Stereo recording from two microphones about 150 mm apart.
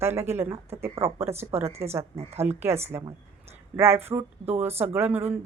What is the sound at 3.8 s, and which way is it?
Speech, 15° right (ahead or behind).